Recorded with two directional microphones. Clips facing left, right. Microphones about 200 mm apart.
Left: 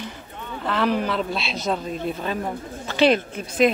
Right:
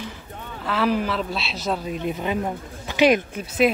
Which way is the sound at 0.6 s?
5° right (ahead or behind).